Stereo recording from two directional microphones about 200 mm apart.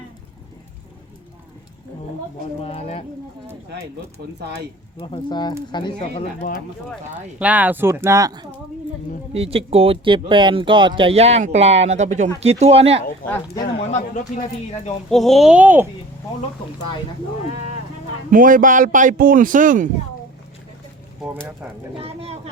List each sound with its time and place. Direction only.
2.6 s speech: 30° left (ahead or behind)
4.4 s speech: 55° right (ahead or behind)
4.9 s speech: 25° left (ahead or behind)
6.9 s speech: 5° right (ahead or behind)
9.3 s a man's voice: 30° right (ahead or behind)
13.2 s speech: 10° left (ahead or behind)
15.1 s speech: centre (ahead or behind)
18.3 s a man's voice: 45° right (ahead or behind)
22.0 s a man's voice: 30° right (ahead or behind)